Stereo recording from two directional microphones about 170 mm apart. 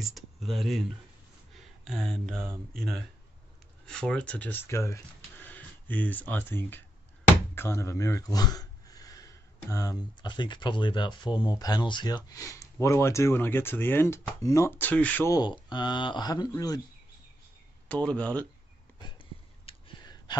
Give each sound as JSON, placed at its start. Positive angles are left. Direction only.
{"t": 0.0, "sound": "speech", "side_deg": 0}
{"t": 3.8, "sound": "speech", "side_deg": 5}
{"t": 15.3, "sound": "speech", "side_deg": 25}
{"t": 17.8, "sound": "speech", "side_deg": 10}
{"t": 18.9, "sound": "a sound", "side_deg": 30}